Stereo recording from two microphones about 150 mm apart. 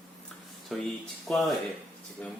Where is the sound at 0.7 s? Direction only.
5° left (ahead or behind).